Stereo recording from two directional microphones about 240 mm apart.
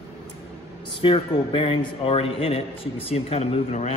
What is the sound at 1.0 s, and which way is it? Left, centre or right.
A man's voice, left.